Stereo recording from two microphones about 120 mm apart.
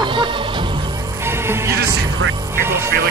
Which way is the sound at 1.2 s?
20° right (ahead or behind).